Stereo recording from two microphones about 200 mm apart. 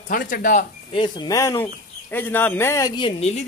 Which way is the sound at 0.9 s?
25° left (ahead or behind).